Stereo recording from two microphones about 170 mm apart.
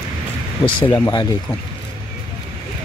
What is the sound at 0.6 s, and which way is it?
Speech, 30° left (ahead or behind).